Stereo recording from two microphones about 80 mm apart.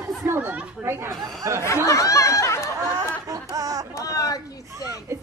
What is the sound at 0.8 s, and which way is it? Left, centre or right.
Chatter, right.